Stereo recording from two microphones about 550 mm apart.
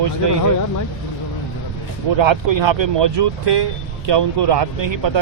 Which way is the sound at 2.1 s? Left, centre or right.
Right.